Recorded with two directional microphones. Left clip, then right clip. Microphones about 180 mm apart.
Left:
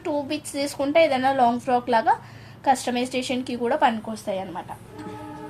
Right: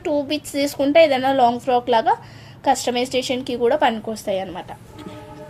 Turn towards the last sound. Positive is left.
turn(degrees=-40)  # may be behind; listen again after turning